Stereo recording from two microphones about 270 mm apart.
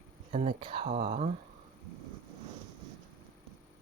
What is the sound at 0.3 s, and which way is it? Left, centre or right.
Speech, right.